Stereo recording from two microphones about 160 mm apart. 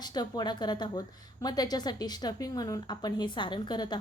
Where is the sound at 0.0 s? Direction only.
25° left (ahead or behind).